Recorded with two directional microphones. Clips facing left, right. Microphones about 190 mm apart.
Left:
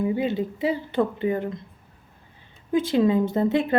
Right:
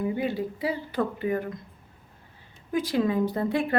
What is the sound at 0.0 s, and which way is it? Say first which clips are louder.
Speech: left 4 dB; 20° left (ahead or behind).